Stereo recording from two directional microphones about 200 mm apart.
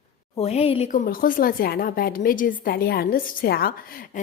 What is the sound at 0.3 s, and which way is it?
Speech, 30° left (ahead or behind).